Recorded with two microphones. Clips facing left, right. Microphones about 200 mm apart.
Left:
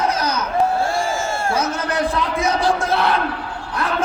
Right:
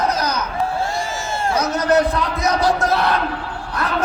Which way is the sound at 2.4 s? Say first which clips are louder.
Right 2 dB; 40° right (ahead or behind).